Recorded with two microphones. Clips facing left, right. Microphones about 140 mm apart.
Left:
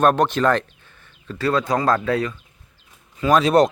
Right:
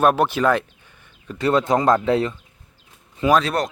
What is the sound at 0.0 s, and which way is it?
Speech, 5° right (ahead or behind).